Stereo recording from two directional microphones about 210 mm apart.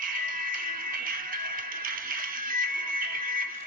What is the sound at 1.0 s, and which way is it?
Music, 40° right (ahead or behind).